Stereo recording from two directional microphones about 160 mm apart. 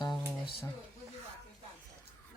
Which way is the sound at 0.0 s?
30° left (ahead or behind).